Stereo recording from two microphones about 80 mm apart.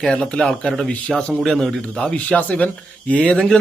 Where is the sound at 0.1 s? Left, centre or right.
Centre.